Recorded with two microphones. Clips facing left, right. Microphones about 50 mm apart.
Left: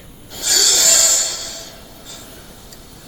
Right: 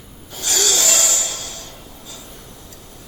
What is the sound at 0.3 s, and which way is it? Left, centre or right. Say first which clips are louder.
Rub: left 1 dB; right.